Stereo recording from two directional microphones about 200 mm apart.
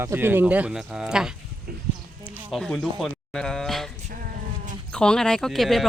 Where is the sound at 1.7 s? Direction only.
50° right (ahead or behind).